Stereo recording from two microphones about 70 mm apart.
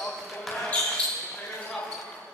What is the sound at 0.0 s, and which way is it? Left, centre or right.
Basketball bounce, centre.